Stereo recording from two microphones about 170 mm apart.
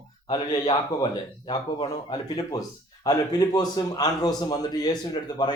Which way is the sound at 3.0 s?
20° left (ahead or behind).